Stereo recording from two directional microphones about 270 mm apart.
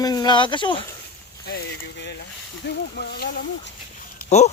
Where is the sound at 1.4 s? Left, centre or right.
Left.